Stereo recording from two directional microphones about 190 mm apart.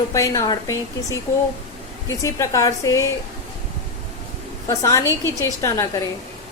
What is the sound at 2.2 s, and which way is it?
Speech, 15° left (ahead or behind).